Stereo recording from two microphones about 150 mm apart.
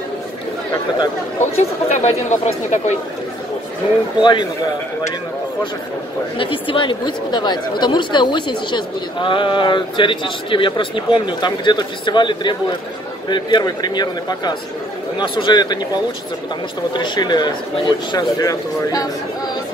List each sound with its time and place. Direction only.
1.4 s speech: 50° left (ahead or behind)
4.2 s speech: 30° left (ahead or behind)
6.3 s speech: 35° left (ahead or behind)